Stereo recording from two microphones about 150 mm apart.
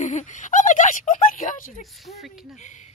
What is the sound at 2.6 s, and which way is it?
Speech, 50° left (ahead or behind).